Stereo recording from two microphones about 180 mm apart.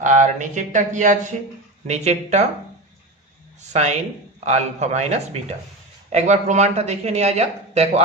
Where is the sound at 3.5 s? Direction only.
40° right (ahead or behind).